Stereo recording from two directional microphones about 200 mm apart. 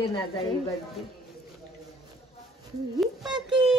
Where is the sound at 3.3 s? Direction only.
20° right (ahead or behind).